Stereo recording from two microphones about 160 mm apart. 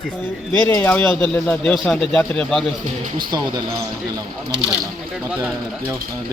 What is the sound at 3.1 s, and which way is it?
Speech, 25° right (ahead or behind).